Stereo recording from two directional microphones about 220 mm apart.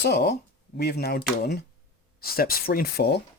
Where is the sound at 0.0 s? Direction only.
45° left (ahead or behind).